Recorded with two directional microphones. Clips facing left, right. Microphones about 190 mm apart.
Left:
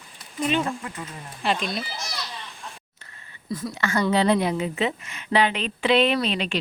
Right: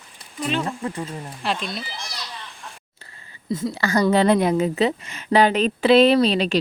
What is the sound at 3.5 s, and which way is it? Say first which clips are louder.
A woman's voice: right 4 dB; 30° right (ahead or behind).